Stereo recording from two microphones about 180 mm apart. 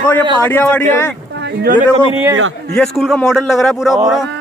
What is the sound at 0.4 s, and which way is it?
Speech, 10° left (ahead or behind).